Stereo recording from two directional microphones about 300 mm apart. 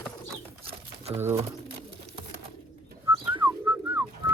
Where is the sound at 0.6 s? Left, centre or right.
Centre.